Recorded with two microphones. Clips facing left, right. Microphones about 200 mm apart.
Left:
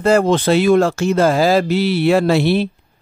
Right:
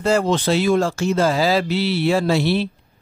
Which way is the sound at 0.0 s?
55° left (ahead or behind).